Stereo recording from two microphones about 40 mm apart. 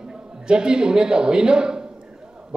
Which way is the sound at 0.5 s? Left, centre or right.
Right.